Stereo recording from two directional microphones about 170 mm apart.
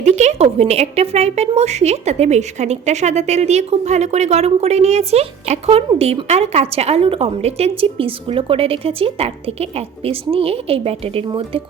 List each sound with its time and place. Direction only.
0.0 s a woman's voice: 40° right (ahead or behind)